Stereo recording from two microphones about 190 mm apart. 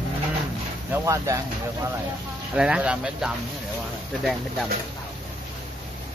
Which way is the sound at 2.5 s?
5° right (ahead or behind).